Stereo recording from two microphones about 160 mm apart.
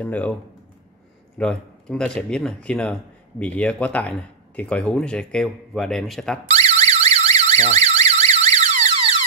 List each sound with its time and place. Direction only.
0.0 s speech: 10° left (ahead or behind)
1.4 s speech: 5° left (ahead or behind)
6.4 s alarm: 45° right (ahead or behind)